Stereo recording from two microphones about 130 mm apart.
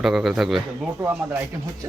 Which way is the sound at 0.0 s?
5° right (ahead or behind).